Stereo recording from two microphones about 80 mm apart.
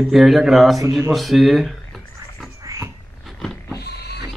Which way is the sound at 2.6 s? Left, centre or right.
Right.